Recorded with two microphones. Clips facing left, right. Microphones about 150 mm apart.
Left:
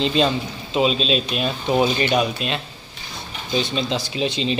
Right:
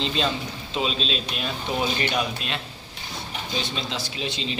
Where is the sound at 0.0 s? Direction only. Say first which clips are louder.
Left 6 dB; 15° left (ahead or behind).